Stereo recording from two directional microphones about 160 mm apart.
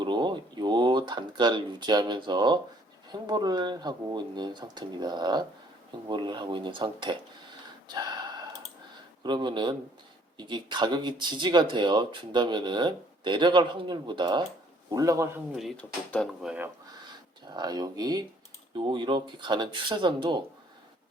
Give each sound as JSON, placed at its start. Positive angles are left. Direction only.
{"t": 0.0, "sound": "a sound", "side_deg": -30}
{"t": 3.1, "sound": "speech", "side_deg": -25}
{"t": 7.9, "sound": "a sound", "side_deg": -25}
{"t": 9.2, "sound": "speech", "side_deg": -30}
{"t": 15.5, "sound": "speech", "side_deg": 5}
{"t": 16.4, "sound": "speech", "side_deg": -5}
{"t": 17.5, "sound": "speech", "side_deg": -25}